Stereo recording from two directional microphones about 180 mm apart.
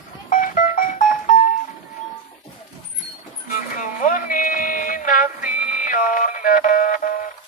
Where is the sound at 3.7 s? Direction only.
45° left (ahead or behind).